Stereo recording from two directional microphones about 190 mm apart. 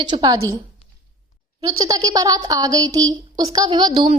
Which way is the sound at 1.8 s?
20° right (ahead or behind).